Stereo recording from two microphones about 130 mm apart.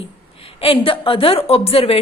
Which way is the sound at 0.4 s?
45° left (ahead or behind).